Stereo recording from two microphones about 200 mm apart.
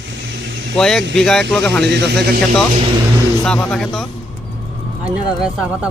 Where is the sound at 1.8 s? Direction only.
55° right (ahead or behind).